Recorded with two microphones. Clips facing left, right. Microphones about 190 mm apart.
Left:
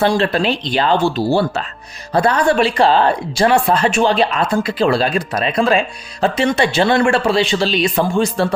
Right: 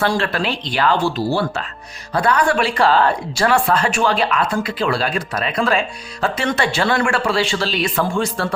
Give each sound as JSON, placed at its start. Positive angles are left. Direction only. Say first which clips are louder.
{"t": 0.0, "sound": "speech", "louder": "left 4 dB", "side_deg": 20}